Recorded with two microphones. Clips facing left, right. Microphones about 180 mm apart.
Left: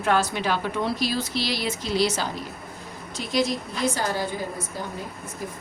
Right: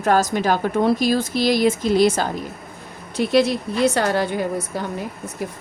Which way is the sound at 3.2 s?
65° right (ahead or behind).